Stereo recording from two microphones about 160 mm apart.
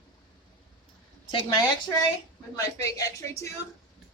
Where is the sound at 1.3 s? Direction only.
30° left (ahead or behind).